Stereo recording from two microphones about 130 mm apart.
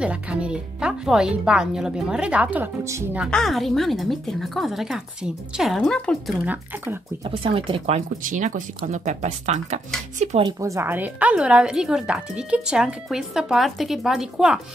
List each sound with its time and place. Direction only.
0.0 s speech: 10° right (ahead or behind)
2.8 s a woman's voice: 20° right (ahead or behind)
3.3 s a woman's voice: 5° left (ahead or behind)
6.3 s speech: 10° right (ahead or behind)
7.2 s speech: 45° right (ahead or behind)
8.2 s speech: 80° right; by 10.4 s 65° right (ahead or behind)
10.6 s a woman's voice: 20° right (ahead or behind); by 14.6 s 5° right (ahead or behind)